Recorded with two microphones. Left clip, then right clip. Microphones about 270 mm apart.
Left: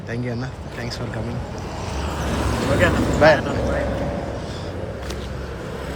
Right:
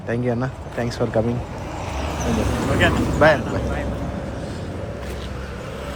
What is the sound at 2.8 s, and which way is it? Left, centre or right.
Speech, centre.